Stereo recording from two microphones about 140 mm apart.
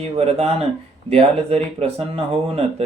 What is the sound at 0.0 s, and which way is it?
Speech, 50° right (ahead or behind).